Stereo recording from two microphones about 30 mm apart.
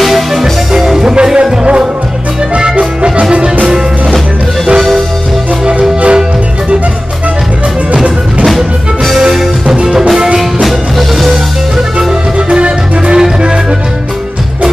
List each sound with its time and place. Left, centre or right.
0.0 s music: centre
1.1 s music: right
2.8 s music: right
4.7 s music: centre
5.8 s music: right
7.9 s music: right
9.3 s music: centre
10.6 s music: centre
12.4 s music: right